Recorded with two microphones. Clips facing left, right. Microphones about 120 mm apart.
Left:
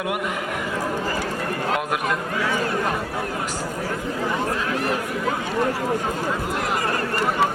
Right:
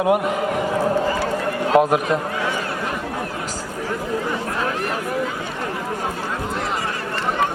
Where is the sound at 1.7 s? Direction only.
35° right (ahead or behind).